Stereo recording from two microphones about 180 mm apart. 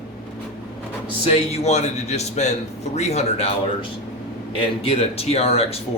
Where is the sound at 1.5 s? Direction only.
35° left (ahead or behind).